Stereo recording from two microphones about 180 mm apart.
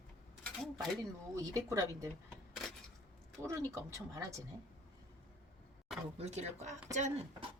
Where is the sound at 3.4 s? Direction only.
15° right (ahead or behind).